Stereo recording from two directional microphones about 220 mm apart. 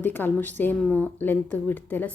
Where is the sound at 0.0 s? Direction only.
10° left (ahead or behind).